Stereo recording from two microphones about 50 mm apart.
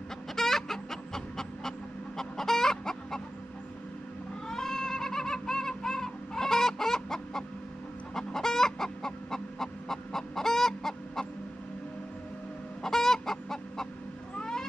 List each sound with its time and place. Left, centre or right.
0.4 s chicken: centre
4.5 s goat: centre
8.1 s chicken: centre
12.8 s chicken: centre
14.3 s cat: centre